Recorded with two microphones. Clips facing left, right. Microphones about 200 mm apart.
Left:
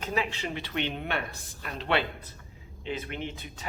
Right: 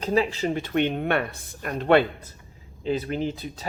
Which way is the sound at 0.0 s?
35° right (ahead or behind).